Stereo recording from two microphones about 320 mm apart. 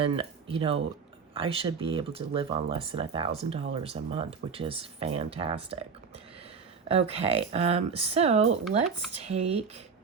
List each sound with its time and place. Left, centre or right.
0.0 s speech: centre
6.8 s speech: centre